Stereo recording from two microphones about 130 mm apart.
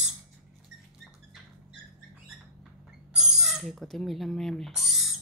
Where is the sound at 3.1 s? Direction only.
5° right (ahead or behind).